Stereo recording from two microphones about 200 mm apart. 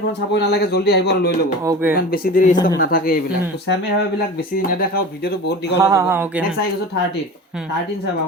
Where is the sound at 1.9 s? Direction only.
50° left (ahead or behind).